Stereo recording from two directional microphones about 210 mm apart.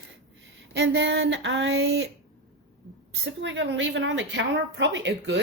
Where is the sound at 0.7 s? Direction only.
55° right (ahead or behind).